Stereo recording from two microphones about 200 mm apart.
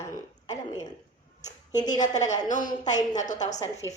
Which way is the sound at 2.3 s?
40° left (ahead or behind).